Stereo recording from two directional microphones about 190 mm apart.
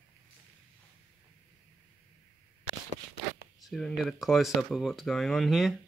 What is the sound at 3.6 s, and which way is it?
Speech, centre (ahead or behind).